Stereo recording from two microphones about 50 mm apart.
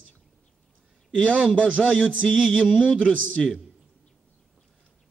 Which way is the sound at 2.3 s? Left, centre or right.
Centre.